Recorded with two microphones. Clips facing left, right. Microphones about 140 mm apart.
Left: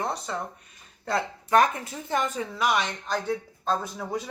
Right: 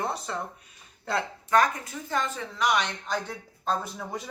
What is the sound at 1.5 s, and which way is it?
Speech, 25° left (ahead or behind).